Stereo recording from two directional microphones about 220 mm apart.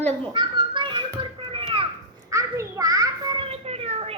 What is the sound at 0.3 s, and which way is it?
Children playing, 20° right (ahead or behind).